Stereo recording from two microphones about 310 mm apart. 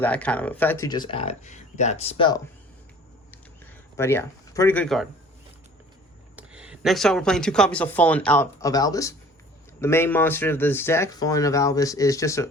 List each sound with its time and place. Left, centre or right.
0.0 s speech: centre
3.9 s speech: centre
6.3 s speech: centre